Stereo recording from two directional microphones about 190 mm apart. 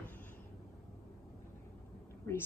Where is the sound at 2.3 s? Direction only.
15° left (ahead or behind).